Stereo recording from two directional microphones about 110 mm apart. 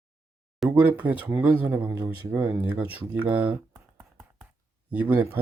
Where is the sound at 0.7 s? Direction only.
15° right (ahead or behind).